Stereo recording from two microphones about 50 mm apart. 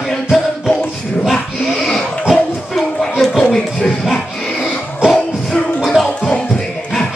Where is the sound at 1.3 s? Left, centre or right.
Centre.